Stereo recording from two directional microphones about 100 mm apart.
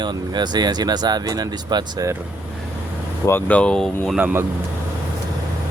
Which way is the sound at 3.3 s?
15° left (ahead or behind).